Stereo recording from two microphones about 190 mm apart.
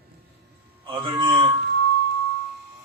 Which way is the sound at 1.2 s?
25° right (ahead or behind).